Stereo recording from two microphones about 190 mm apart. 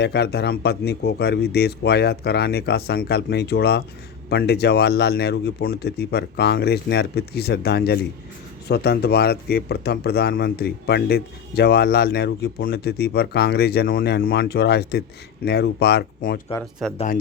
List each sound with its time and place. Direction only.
0.0 s speech: 60° left (ahead or behind)
16.8 s speech: centre (ahead or behind)